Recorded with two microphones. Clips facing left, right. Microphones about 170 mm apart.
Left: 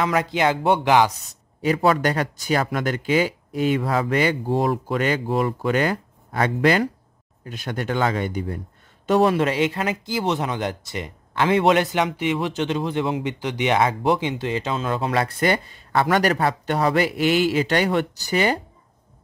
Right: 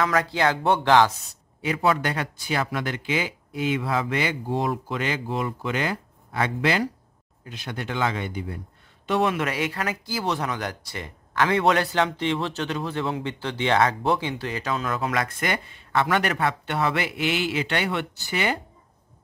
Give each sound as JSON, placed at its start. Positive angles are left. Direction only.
{"t": 0.0, "sound": "speech", "side_deg": 20}
{"t": 1.6, "sound": "speech", "side_deg": 40}